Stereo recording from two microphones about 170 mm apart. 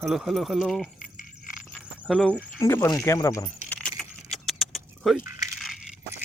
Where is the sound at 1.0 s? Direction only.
50° left (ahead or behind).